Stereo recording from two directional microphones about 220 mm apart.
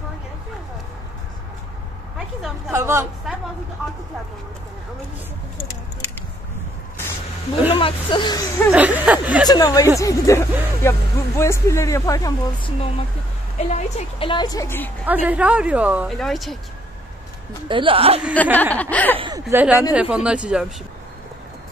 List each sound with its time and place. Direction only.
2.1 s a woman's voice: 5° right (ahead or behind)
7.7 s a woman's voice: 25° left (ahead or behind)
8.7 s speech: 5° right (ahead or behind)
9.5 s speech: 15° left (ahead or behind)
13.7 s a woman's voice: 30° left (ahead or behind); by 14.9 s 15° left (ahead or behind)
15.0 s speech: 5° right (ahead or behind)
17.6 s speech: 25° right (ahead or behind)
18.3 s speech: 5° left (ahead or behind)
19.1 s a sound: 20° right (ahead or behind)
19.4 s speech: 5° right (ahead or behind)